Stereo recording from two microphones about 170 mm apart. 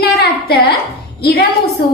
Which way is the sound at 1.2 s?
75° left (ahead or behind).